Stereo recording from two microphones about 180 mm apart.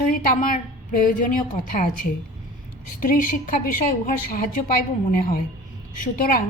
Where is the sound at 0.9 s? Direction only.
50° left (ahead or behind).